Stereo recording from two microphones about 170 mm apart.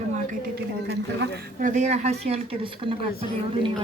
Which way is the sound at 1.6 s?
45° right (ahead or behind).